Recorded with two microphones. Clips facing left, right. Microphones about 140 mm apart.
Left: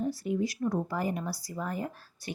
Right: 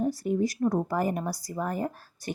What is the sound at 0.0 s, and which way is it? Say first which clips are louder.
Lullaby: right 4 dB; 45° right (ahead or behind).